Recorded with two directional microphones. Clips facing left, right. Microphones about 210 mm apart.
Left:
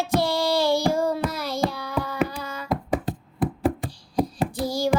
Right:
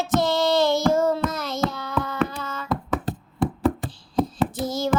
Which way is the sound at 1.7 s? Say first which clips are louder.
Right 1 dB; 10° left (ahead or behind).